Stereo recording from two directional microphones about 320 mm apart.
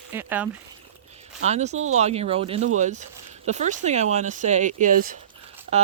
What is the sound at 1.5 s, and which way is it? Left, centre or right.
Speech, right.